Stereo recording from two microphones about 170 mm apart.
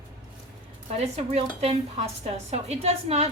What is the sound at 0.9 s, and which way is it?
Speech, 40° right (ahead or behind).